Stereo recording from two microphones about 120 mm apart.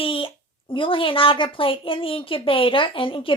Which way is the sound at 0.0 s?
45° left (ahead or behind).